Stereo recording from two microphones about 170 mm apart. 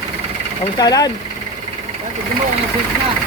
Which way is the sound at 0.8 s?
25° left (ahead or behind).